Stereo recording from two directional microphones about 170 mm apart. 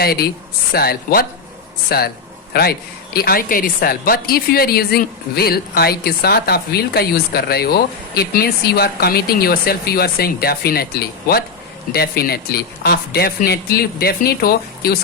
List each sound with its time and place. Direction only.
0.0 s a woman's voice: 65° left (ahead or behind)